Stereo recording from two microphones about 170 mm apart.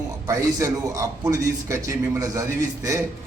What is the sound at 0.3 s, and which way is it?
A man's voice, 20° right (ahead or behind).